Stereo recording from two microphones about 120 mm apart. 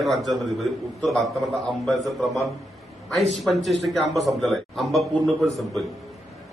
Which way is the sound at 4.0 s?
Centre (ahead or behind).